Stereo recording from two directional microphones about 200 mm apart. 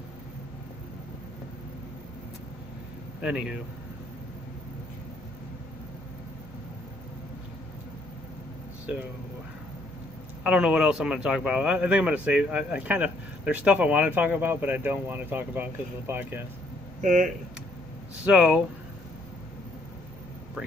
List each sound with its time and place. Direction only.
3.2 s a man's voice: 5° right (ahead or behind)
10.4 s speech: 5° right (ahead or behind)
17.0 s speech: 40° right (ahead or behind)
18.1 s speech: 5° right (ahead or behind)